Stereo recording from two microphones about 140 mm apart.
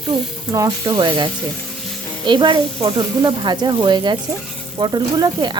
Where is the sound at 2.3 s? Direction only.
35° right (ahead or behind).